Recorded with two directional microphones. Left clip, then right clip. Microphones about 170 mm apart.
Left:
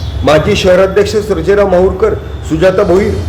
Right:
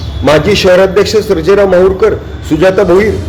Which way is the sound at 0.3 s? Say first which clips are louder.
Right 1 dB; 25° right (ahead or behind).